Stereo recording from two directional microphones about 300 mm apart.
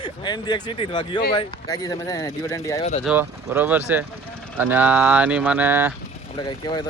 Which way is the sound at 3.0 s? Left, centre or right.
Centre.